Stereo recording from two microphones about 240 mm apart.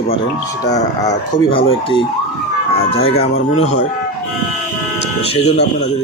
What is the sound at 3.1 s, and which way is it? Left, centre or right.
Speech, left.